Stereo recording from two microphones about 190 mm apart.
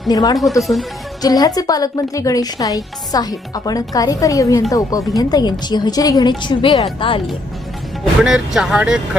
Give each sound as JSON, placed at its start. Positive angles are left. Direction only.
{"t": 0.1, "sound": "a woman's voice", "side_deg": 20}
{"t": 8.2, "sound": "speech", "side_deg": -5}